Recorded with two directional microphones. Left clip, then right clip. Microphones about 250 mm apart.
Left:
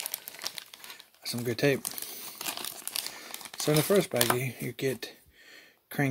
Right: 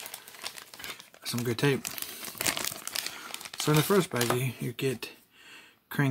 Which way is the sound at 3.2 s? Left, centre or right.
Centre.